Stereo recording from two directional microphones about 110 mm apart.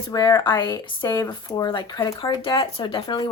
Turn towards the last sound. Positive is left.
turn(degrees=45)  # may be behind; listen again after turning